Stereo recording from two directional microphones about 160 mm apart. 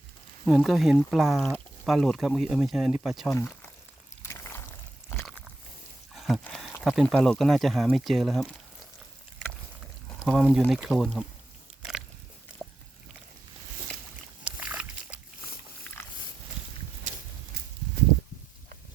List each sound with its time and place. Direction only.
0.4 s speech: centre (ahead or behind)
4.2 s a sound: 15° left (ahead or behind)
6.1 s rowboat: centre (ahead or behind)
6.4 s speech: 5° left (ahead or behind)
10.2 s speech: 5° right (ahead or behind)
11.8 s biting: 5° right (ahead or behind)
12.6 s a sound: 5° left (ahead or behind)
14.4 s slosh: 10° right (ahead or behind)
16.0 s pig: 15° left (ahead or behind)